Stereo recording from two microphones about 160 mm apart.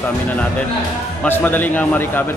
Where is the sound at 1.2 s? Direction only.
10° left (ahead or behind).